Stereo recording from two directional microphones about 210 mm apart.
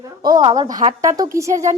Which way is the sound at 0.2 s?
20° right (ahead or behind).